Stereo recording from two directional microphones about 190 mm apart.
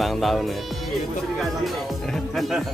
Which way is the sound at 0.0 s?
Centre (ahead or behind).